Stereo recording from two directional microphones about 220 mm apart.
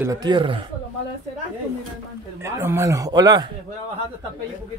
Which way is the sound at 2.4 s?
10° right (ahead or behind).